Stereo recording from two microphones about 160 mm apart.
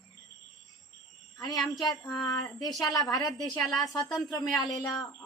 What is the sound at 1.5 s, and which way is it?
Speech, centre (ahead or behind).